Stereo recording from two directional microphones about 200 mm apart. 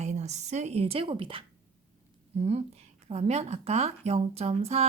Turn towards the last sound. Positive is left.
turn(degrees=-30)  # may be behind; listen again after turning